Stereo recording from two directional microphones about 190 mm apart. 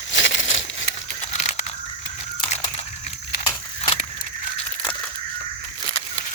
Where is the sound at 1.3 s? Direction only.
35° left (ahead or behind).